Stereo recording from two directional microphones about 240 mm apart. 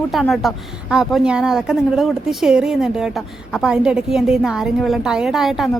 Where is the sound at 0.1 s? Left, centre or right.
Centre.